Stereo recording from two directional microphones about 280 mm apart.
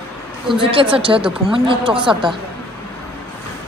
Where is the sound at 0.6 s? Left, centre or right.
Centre.